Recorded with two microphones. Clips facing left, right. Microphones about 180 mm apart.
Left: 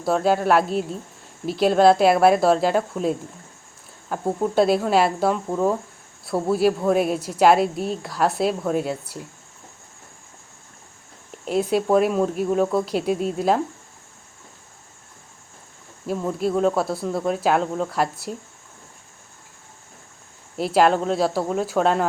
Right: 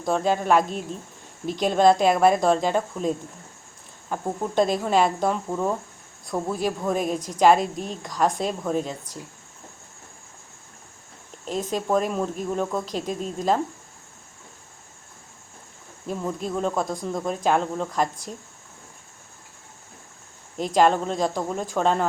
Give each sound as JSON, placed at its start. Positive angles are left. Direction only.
{"t": 0.0, "sound": "a woman's voice", "side_deg": 5}
{"t": 11.4, "sound": "a woman's voice", "side_deg": 10}
{"t": 16.0, "sound": "speech", "side_deg": 5}
{"t": 20.6, "sound": "a woman's voice", "side_deg": 5}